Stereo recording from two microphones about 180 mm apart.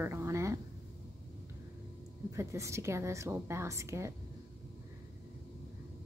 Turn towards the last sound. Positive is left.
turn(degrees=-15)  # may be behind; listen again after turning